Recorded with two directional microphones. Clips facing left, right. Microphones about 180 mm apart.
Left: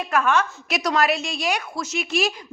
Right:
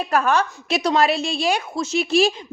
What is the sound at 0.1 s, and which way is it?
A woman's voice, 35° right (ahead or behind).